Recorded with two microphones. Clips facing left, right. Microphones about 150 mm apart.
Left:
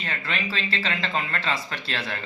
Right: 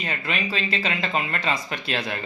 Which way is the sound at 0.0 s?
15° right (ahead or behind).